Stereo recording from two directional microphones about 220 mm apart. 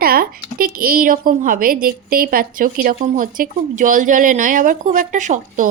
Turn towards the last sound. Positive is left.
turn(degrees=-35)  # may be behind; listen again after turning